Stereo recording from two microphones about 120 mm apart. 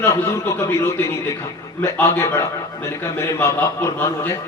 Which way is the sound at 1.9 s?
20° left (ahead or behind).